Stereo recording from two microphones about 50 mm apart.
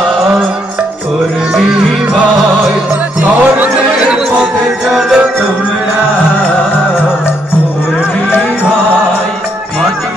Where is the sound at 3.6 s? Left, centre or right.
Right.